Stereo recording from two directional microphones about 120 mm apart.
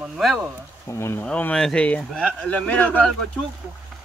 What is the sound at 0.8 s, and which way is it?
Speech, 20° left (ahead or behind).